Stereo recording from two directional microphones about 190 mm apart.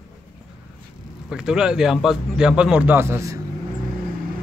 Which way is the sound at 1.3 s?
5° right (ahead or behind).